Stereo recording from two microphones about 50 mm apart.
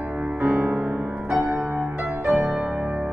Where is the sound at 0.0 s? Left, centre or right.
Right.